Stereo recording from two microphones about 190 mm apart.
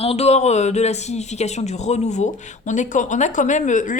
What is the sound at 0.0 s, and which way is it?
Speech, 30° left (ahead or behind).